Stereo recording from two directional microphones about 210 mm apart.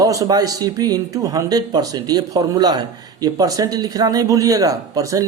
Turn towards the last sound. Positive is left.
turn(degrees=-15)  # may be behind; listen again after turning